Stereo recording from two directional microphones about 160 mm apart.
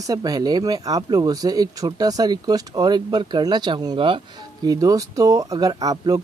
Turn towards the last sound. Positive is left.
turn(degrees=-25)  # may be behind; listen again after turning